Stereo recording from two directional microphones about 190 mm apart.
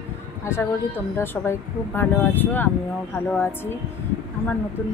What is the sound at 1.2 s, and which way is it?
Speech, 10° left (ahead or behind).